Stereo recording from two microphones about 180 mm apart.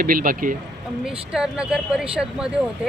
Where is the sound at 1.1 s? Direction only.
5° right (ahead or behind).